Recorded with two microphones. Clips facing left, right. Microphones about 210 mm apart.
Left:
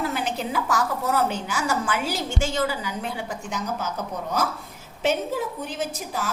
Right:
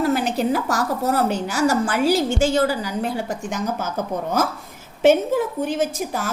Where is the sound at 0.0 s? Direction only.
40° right (ahead or behind).